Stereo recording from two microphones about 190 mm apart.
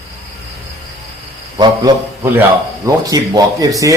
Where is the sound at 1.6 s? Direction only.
20° right (ahead or behind).